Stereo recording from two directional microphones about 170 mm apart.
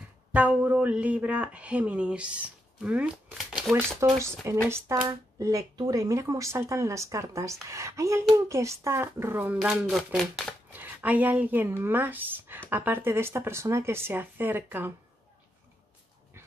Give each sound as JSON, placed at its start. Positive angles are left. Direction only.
{"t": 0.3, "sound": "a woman's voice", "side_deg": -10}